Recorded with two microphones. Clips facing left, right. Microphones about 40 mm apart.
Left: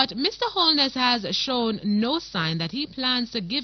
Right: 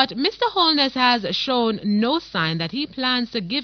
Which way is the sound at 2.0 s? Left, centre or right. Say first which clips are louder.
Right 4 dB; centre.